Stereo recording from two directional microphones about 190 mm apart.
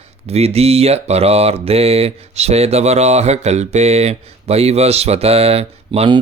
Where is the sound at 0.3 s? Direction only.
35° right (ahead or behind).